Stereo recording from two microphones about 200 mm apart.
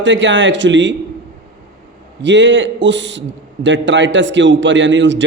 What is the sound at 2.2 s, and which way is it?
A man's voice, 65° right (ahead or behind).